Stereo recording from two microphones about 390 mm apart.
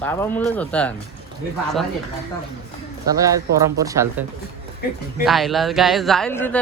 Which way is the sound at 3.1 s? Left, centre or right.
Centre.